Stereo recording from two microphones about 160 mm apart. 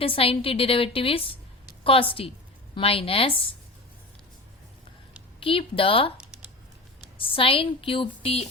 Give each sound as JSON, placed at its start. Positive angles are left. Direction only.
{"t": 0.0, "sound": "a woman's voice", "side_deg": 35}
{"t": 5.4, "sound": "a woman's voice", "side_deg": 35}
{"t": 7.2, "sound": "a woman's voice", "side_deg": 35}